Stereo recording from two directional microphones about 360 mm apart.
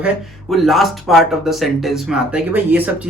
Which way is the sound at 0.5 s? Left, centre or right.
Centre.